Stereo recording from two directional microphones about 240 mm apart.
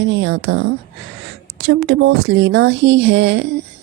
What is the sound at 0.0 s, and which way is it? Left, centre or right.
A woman's voice, right.